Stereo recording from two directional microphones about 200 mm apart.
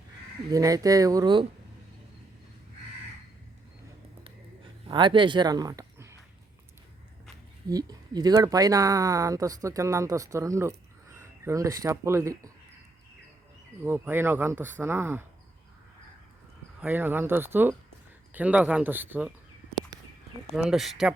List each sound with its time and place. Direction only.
0.5 s speech: 15° right (ahead or behind)
4.9 s speech: 25° right (ahead or behind)
7.7 s speech: 20° right (ahead or behind)
13.8 s speech: 10° right (ahead or behind)
16.8 s speech: 10° right (ahead or behind)
20.6 s speech: centre (ahead or behind)